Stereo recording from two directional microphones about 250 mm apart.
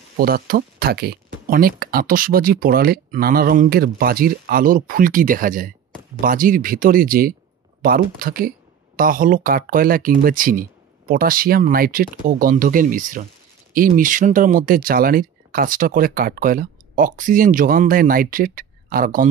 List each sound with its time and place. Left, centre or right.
0.2 s speech: right